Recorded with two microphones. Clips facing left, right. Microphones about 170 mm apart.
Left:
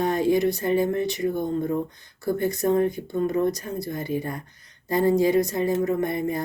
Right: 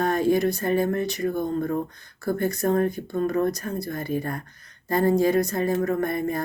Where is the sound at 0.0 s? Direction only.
20° left (ahead or behind).